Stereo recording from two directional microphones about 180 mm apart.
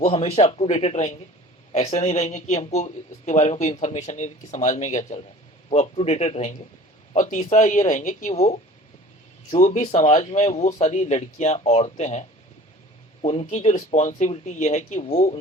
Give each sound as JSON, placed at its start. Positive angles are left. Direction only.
{"t": 0.0, "sound": "speech", "side_deg": 35}
{"t": 13.2, "sound": "speech", "side_deg": 35}